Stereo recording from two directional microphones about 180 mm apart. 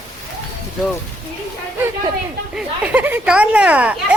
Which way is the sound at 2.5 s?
5° right (ahead or behind).